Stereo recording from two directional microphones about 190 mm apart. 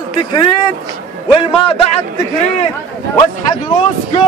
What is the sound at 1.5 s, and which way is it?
Speech, 30° left (ahead or behind).